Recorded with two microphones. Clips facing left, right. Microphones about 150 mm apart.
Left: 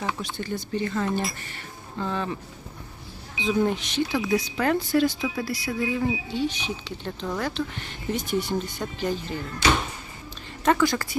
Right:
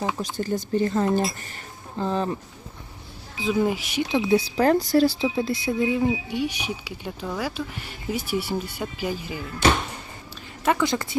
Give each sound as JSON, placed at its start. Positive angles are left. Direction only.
{"t": 0.2, "sound": "speech", "side_deg": -40}
{"t": 3.4, "sound": "speech", "side_deg": -5}
{"t": 4.1, "sound": "speech", "side_deg": -25}
{"t": 10.7, "sound": "speech", "side_deg": -20}